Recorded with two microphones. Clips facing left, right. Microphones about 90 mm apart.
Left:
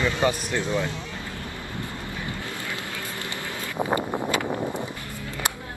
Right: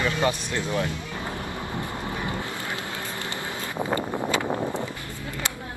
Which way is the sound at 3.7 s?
15° left (ahead or behind).